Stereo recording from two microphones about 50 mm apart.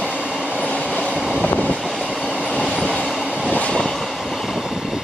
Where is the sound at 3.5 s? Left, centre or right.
Left.